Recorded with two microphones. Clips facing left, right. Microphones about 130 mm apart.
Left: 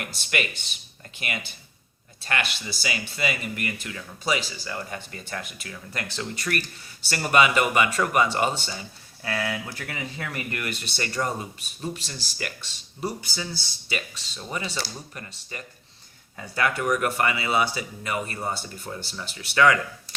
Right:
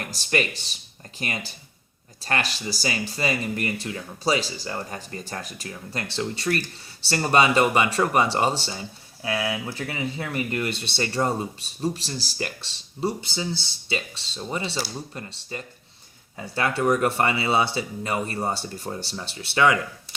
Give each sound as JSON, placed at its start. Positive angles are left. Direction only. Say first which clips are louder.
{"t": 0.0, "sound": "speech", "louder": "right 4 dB", "side_deg": -35}
{"t": 9.2, "sound": "speech", "louder": "right 2 dB", "side_deg": -15}